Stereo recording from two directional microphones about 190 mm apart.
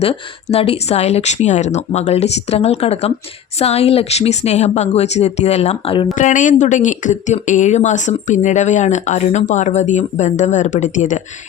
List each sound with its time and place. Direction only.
0.5 s speech: 30° left (ahead or behind)
6.1 s speech: 40° left (ahead or behind)